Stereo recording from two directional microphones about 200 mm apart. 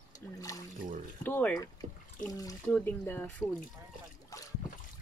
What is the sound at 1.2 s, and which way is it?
Speech, 10° left (ahead or behind).